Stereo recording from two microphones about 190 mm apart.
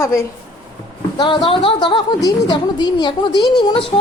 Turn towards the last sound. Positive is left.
turn(degrees=25)  # may be behind; listen again after turning